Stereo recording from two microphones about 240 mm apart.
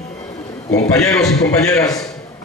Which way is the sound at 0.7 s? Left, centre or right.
Centre.